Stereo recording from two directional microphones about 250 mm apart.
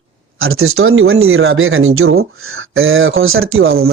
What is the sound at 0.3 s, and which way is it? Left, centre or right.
Speech, right.